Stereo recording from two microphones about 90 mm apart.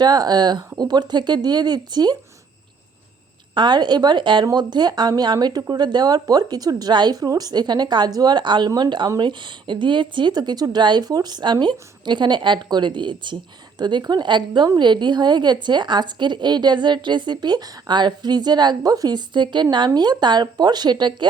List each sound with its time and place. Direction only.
0.0 s speech: 50° right (ahead or behind)
3.5 s a woman's voice: 55° right (ahead or behind)
4.5 s a woman's voice: 55° right (ahead or behind)